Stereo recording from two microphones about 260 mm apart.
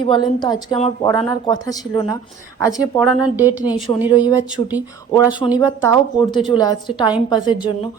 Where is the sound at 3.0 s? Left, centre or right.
Centre.